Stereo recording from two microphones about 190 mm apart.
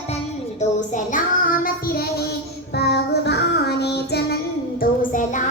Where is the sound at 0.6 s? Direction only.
40° left (ahead or behind); by 4.4 s 60° left (ahead or behind).